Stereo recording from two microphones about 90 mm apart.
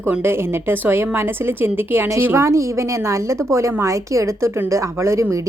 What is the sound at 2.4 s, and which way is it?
A woman's voice, 35° right (ahead or behind).